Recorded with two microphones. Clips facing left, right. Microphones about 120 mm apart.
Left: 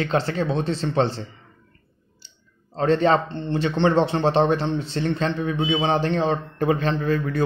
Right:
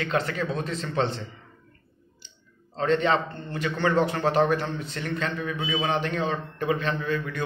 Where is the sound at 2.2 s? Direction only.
35° left (ahead or behind).